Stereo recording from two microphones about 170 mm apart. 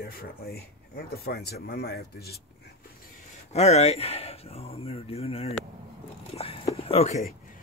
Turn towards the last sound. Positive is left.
turn(degrees=40)  # may be behind; listen again after turning